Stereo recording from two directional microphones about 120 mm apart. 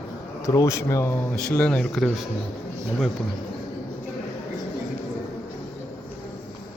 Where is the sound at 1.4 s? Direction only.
10° left (ahead or behind).